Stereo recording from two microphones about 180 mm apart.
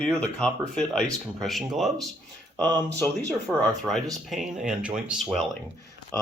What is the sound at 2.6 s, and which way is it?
Speech, 20° right (ahead or behind).